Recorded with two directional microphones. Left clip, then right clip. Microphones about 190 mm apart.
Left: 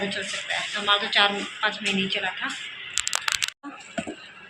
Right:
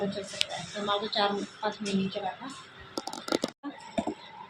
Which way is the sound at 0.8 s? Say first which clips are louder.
Left 6 dB; 20° left (ahead or behind).